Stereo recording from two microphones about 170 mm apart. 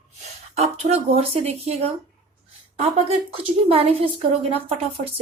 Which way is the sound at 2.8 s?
35° right (ahead or behind).